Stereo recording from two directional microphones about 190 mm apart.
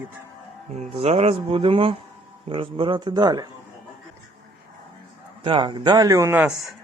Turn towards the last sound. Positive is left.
turn(degrees=-15)  # may be behind; listen again after turning